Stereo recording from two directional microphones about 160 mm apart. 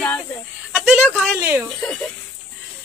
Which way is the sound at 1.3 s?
15° right (ahead or behind).